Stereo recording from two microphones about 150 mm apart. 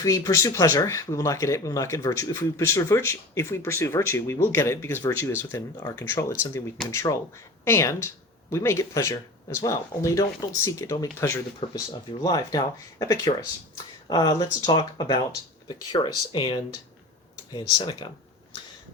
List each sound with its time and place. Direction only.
0.0 s speech: 20° left (ahead or behind)